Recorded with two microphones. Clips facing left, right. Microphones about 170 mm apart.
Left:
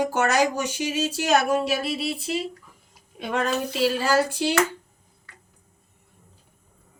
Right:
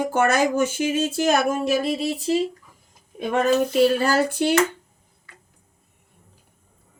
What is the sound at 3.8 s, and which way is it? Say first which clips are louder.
Speech: right 2 dB; 55° right (ahead or behind).